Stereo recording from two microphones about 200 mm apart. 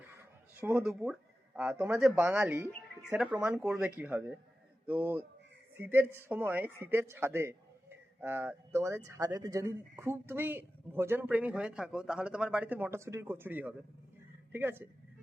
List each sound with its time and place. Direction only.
0.6 s a woman's voice: 5° right (ahead or behind)